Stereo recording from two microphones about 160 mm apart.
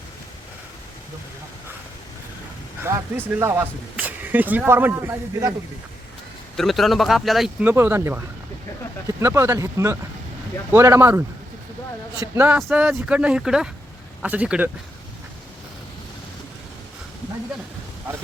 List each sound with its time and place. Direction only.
2.8 s speech: 15° right (ahead or behind)
6.6 s speech: centre (ahead or behind); by 11.2 s 15° right (ahead or behind)
12.2 s speech: 15° right (ahead or behind)
12.6 s speech: 5° right (ahead or behind)